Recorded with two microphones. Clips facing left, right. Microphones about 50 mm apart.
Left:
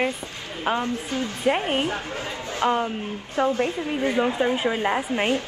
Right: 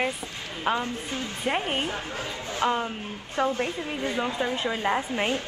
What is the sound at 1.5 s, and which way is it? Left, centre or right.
A woman's voice, left.